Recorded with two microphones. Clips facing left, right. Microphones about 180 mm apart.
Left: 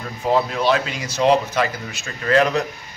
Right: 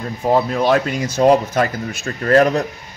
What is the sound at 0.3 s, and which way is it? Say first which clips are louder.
Speech: right 3 dB; 45° right (ahead or behind).